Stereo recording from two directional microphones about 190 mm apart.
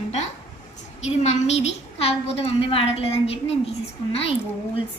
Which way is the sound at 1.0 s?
35° left (ahead or behind).